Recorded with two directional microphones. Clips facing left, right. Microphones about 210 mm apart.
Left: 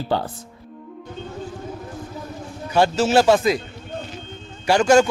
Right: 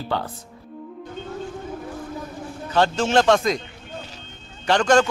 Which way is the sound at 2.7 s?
10° left (ahead or behind).